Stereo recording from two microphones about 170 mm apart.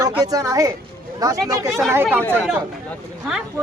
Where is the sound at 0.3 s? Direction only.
20° right (ahead or behind).